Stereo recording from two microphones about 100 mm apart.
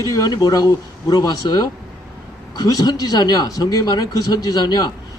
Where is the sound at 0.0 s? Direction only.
35° left (ahead or behind).